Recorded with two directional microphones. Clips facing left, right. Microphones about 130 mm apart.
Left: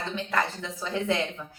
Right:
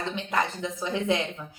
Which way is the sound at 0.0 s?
20° right (ahead or behind).